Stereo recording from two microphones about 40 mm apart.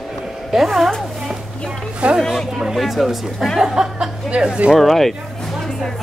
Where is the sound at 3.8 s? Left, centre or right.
Right.